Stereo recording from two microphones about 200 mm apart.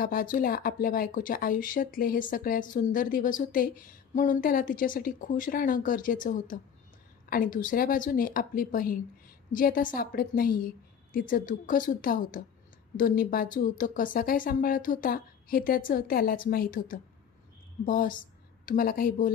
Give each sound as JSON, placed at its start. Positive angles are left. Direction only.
{"t": 0.0, "sound": "a woman's voice", "side_deg": 45}